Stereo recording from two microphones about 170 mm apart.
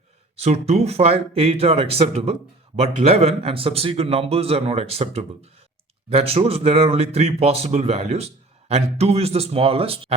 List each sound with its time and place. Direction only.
0.3 s speech: 35° right (ahead or behind)